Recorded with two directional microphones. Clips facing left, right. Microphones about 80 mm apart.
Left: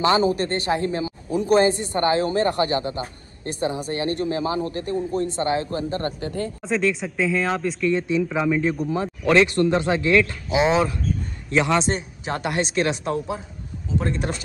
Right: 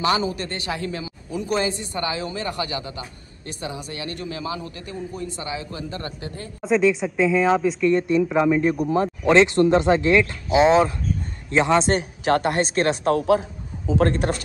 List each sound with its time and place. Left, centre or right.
0.0 s speech: left
1.8 s a man's voice: left
6.6 s a woman's voice: centre
8.9 s speech: right
11.9 s speech: right
12.4 s speech: right
13.1 s a man's voice: right
14.1 s speech: right